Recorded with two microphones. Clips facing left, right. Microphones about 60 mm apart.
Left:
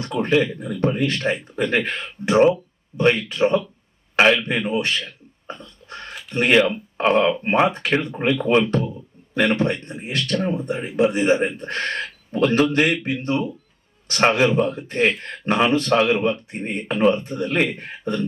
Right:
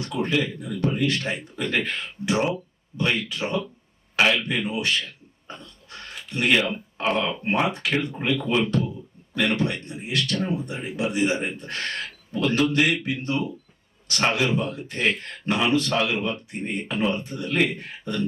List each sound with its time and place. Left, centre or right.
0.0 s speech: left